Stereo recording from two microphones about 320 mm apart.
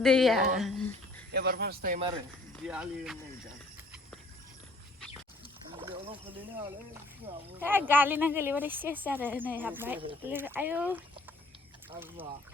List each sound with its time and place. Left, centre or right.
0.0 s a sound: centre
1.3 s speech: right
2.6 s speech: centre
5.7 s gargling: centre
6.3 s speech: centre